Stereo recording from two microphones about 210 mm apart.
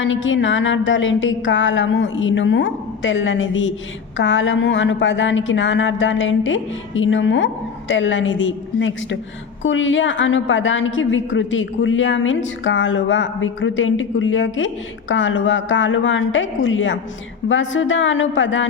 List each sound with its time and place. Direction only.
0.0 s a woman's voice: 65° left (ahead or behind)